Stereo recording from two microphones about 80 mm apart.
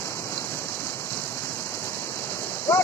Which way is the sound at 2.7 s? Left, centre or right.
Left.